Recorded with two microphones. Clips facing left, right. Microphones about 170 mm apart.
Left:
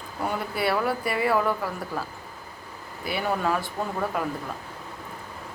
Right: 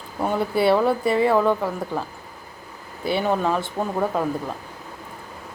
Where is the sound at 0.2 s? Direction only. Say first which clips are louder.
Right 7 dB; 25° right (ahead or behind).